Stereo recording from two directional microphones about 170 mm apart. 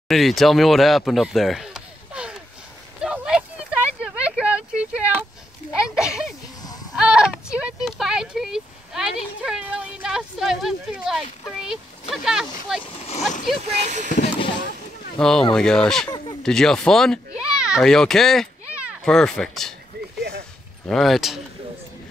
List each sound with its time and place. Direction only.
0.1 s speech: centre (ahead or behind)
3.0 s a sound: 5° right (ahead or behind)
11.4 s speech: centre (ahead or behind)
12.8 s speech: 35° left (ahead or behind)
13.7 s speech: 40° right (ahead or behind)
15.1 s speech: 5° left (ahead or behind)
20.2 s a sound: 70° right (ahead or behind)
20.9 s speech: centre (ahead or behind)